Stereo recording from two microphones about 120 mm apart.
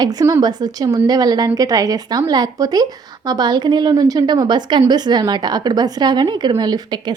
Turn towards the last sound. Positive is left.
turn(degrees=-35)  # may be behind; listen again after turning